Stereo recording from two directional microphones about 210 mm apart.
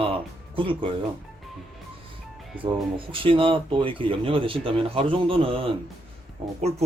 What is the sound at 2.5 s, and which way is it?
Speech, 25° right (ahead or behind).